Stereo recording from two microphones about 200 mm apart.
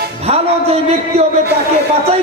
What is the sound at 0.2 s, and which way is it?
A man's voice, 30° right (ahead or behind).